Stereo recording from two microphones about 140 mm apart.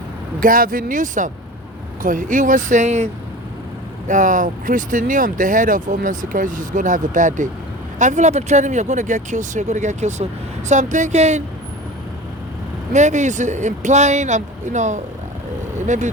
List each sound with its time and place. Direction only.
0.3 s speech: 85° right; by 3.1 s 55° right (ahead or behind)
4.1 s speech: 65° right (ahead or behind)
12.9 s speech: 55° right (ahead or behind)